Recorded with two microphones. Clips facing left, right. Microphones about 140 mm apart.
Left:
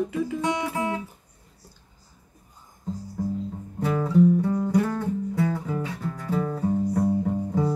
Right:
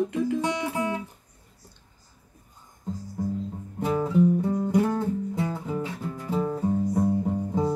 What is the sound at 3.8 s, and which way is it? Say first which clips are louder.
Music: left 2 dB; 20° right (ahead or behind).